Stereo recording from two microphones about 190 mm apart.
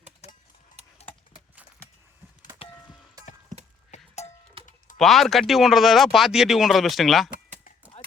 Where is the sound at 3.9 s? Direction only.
35° left (ahead or behind).